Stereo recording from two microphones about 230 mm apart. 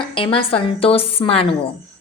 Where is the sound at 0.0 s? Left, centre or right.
Left.